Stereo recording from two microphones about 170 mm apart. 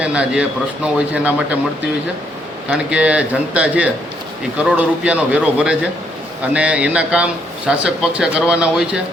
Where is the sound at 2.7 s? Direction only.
5° right (ahead or behind).